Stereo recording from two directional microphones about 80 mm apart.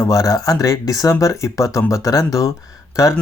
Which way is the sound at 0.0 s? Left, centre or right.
Left.